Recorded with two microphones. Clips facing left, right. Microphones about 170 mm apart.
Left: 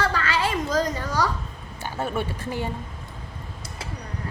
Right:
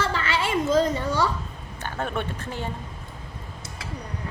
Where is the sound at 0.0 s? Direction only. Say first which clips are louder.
Left 1 dB; 25° right (ahead or behind).